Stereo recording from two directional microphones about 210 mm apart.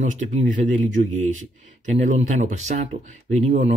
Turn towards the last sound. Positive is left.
turn(degrees=-35)  # may be behind; listen again after turning